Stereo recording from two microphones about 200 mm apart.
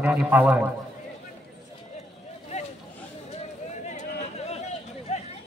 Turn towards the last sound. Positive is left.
turn(degrees=30)  # may be behind; listen again after turning